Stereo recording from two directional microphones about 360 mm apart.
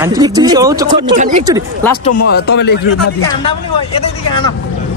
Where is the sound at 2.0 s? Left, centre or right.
Left.